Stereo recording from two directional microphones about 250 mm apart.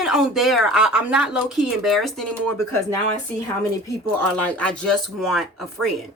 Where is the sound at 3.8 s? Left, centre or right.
Centre.